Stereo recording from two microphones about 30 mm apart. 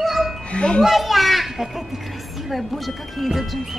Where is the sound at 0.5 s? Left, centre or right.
Left.